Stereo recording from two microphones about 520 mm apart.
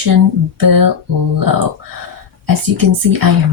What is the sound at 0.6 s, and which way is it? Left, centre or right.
Speech, right.